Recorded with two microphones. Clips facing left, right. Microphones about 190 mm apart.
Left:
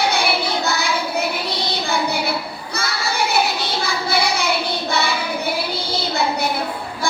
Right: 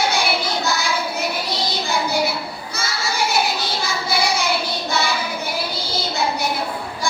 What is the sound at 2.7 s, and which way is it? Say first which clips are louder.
Child singing: left 2 dB; 60° left (ahead or behind).